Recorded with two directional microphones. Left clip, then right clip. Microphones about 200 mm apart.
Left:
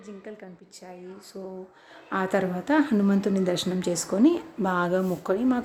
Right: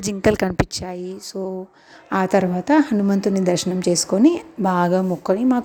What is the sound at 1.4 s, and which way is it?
A woman's voice, 25° right (ahead or behind).